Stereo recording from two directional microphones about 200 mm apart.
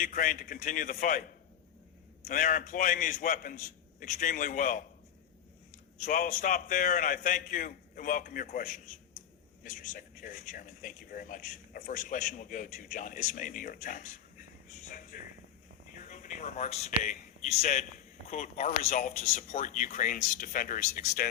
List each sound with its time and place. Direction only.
0.0 s speech: 40° left (ahead or behind)
2.2 s speech: 40° left (ahead or behind)
6.0 s a man's voice: 40° left (ahead or behind)
14.8 s a sound: 40° left (ahead or behind)
15.9 s a man's voice: 40° left (ahead or behind)